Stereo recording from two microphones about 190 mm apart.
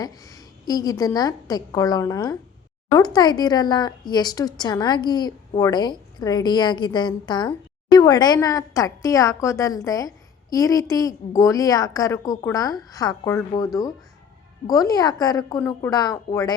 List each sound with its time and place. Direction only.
0.0 s a woman's voice: 20° left (ahead or behind)
14.7 s speech: 20° left (ahead or behind)